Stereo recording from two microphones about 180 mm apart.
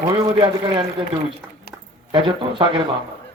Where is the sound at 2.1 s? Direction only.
30° right (ahead or behind).